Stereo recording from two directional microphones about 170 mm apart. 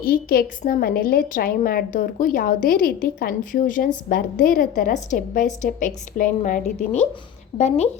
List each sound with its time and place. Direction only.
0.0 s a woman's voice: 60° left (ahead or behind)